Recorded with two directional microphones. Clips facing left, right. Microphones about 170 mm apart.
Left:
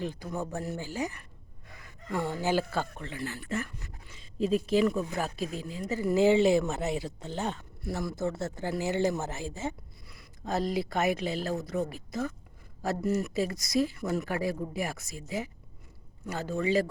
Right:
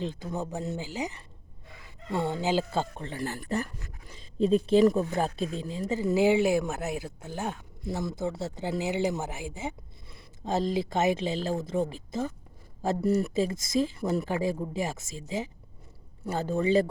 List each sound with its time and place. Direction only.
0.0 s speech: 20° right (ahead or behind)
3.2 s speech: 45° right (ahead or behind); by 7.6 s 10° right (ahead or behind)
7.9 s speech: 20° right (ahead or behind)
10.1 s a sound: 25° right (ahead or behind)
10.8 s speech: 25° right (ahead or behind)
16.2 s speech: 35° right (ahead or behind)